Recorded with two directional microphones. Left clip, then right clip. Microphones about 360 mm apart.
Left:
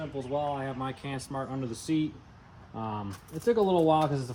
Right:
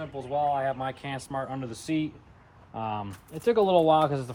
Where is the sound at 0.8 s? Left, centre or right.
Right.